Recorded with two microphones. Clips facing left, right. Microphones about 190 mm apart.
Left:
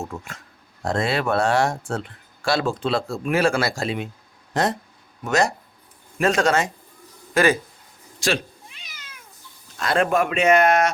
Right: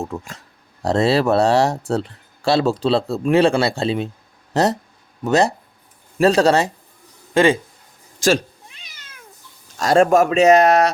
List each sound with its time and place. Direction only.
0.9 s speech: 35° right (ahead or behind)
9.7 s speech: 40° right (ahead or behind)